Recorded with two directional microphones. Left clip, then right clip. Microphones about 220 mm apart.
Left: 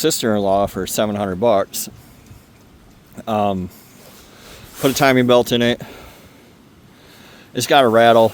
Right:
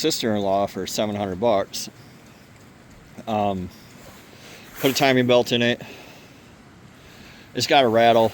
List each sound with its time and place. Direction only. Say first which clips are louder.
0.0 s speech: left 5 dB; 45° left (ahead or behind)
3.2 s speech: left 4 dB; 40° left (ahead or behind)
4.8 s speech: left 4 dB; 40° left (ahead or behind)
7.5 s speech: left 4 dB; 40° left (ahead or behind)